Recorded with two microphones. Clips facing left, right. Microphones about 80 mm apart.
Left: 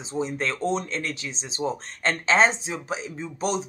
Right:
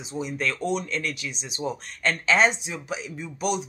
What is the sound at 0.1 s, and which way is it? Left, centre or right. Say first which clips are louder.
Speech: left 1 dB; left.